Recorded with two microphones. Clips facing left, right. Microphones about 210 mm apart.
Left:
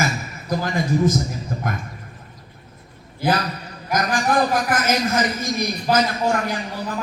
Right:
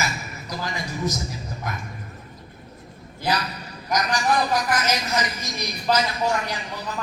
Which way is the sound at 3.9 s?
50° left (ahead or behind).